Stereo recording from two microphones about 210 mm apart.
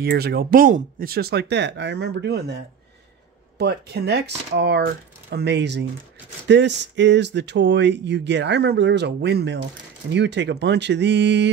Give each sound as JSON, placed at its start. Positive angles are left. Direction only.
{"t": 0.0, "sound": "speech", "side_deg": -50}